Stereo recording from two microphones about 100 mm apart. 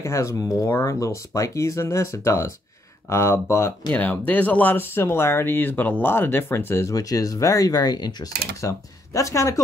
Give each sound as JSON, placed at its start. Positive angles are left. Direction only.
{"t": 0.0, "sound": "speech", "side_deg": 30}
{"t": 0.7, "sound": "speech", "side_deg": 20}
{"t": 0.9, "sound": "speech", "side_deg": 35}